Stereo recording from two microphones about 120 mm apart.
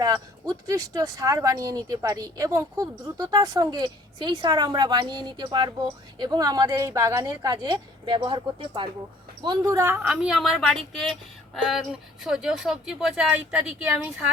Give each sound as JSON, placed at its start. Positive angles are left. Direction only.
{"t": 0.0, "sound": "speech", "side_deg": -30}
{"t": 9.7, "sound": "a woman's voice", "side_deg": -20}
{"t": 10.1, "sound": "speech", "side_deg": -5}